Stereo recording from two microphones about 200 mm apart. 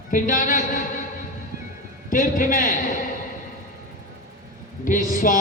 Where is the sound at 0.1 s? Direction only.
40° left (ahead or behind).